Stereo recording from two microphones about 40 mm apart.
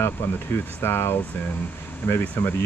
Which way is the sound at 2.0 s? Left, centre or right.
Left.